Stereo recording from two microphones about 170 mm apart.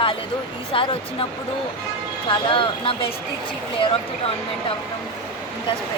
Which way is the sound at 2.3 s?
30° left (ahead or behind).